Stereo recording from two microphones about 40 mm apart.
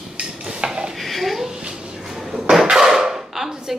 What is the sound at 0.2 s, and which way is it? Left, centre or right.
Dishes, centre.